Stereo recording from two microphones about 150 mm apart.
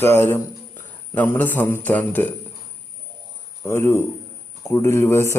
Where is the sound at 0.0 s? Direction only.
15° left (ahead or behind).